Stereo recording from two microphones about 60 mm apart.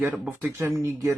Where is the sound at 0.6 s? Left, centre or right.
Right.